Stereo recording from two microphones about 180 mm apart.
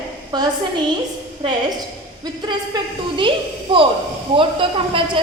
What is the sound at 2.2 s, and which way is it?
A woman's voice, 25° right (ahead or behind).